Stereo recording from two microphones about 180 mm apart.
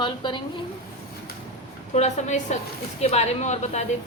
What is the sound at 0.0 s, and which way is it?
Speech, 25° left (ahead or behind).